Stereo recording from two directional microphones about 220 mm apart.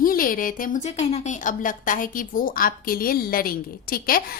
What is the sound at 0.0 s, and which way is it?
A woman's voice, 40° left (ahead or behind).